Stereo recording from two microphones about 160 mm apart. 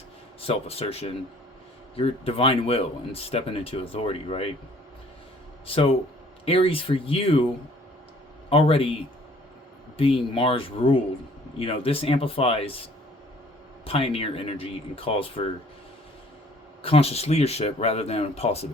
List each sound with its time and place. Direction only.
0.4 s speech: 35° left (ahead or behind)
5.6 s speech: 35° left (ahead or behind)
8.4 s speech: 35° left (ahead or behind)
10.0 s speech: 35° left (ahead or behind)
13.8 s speech: 35° left (ahead or behind)
16.8 s speech: 35° left (ahead or behind)